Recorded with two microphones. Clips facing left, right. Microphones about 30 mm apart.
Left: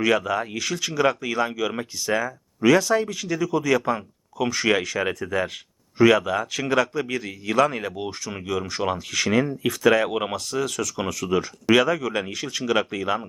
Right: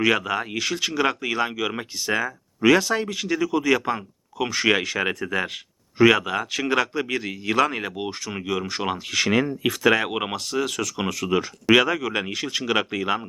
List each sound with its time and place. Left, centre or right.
0.0 s speech: centre